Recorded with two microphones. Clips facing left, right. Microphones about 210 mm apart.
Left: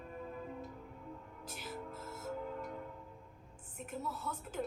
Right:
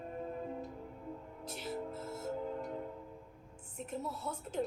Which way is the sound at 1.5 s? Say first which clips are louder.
Right 5 dB; 30° right (ahead or behind).